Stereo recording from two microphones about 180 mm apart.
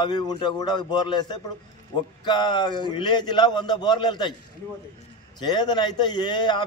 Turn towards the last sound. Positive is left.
turn(degrees=25)  # may be behind; listen again after turning